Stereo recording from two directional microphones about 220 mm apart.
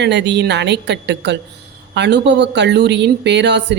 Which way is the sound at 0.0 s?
50° right (ahead or behind).